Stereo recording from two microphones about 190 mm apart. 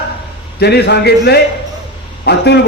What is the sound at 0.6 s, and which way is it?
A man's voice, 60° left (ahead or behind).